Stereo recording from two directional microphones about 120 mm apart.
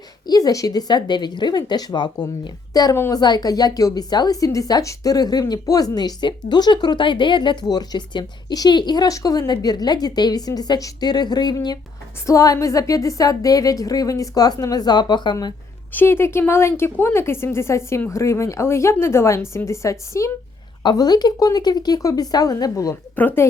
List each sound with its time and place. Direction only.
0.3 s a woman's voice: 30° left (ahead or behind)
15.9 s a woman's voice: 15° left (ahead or behind)
23.1 s speech: 15° left (ahead or behind)